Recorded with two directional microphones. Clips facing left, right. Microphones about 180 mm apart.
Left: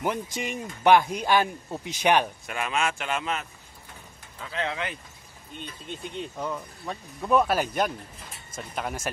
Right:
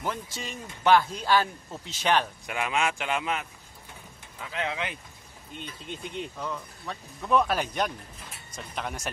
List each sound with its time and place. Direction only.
0.0 s speech: 15° left (ahead or behind)
2.4 s speech: 15° right (ahead or behind)
6.4 s speech: 15° left (ahead or behind)